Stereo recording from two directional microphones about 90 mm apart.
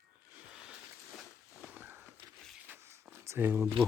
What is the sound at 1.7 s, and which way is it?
Walk, 25° right (ahead or behind).